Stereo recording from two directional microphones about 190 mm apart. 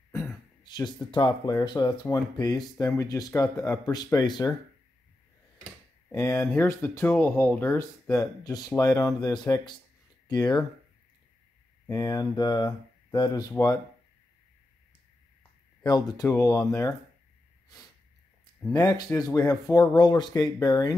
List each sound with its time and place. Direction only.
0.7 s speech: 20° left (ahead or behind)
6.0 s speech: 15° left (ahead or behind)
11.9 s speech: 20° left (ahead or behind)
15.8 s speech: 20° left (ahead or behind)
18.6 s speech: 20° left (ahead or behind)